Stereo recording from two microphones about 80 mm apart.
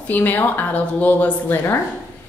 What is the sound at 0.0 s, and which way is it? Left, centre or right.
A woman's voice, left.